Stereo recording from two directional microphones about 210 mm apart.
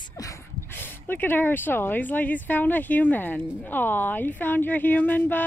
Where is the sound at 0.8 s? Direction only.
10° left (ahead or behind).